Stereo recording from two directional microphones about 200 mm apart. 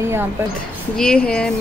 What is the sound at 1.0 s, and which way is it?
Speech, 5° left (ahead or behind).